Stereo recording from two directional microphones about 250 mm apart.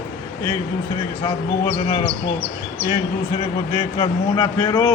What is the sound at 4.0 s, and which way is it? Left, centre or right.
Speech, centre.